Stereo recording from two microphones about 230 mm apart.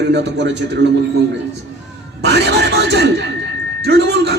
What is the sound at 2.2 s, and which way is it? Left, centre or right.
Speech, right.